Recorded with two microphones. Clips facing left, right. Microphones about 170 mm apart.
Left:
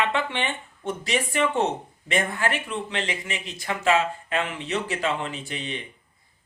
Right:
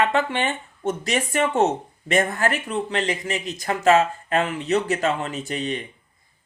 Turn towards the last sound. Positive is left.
turn(degrees=-45)  # may be behind; listen again after turning